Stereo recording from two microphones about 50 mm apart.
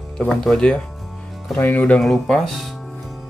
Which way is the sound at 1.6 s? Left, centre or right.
Left.